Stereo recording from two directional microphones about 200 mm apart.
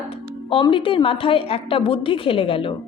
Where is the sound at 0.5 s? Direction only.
25° left (ahead or behind).